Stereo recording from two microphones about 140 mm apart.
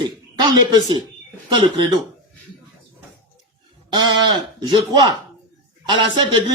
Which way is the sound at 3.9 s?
30° right (ahead or behind).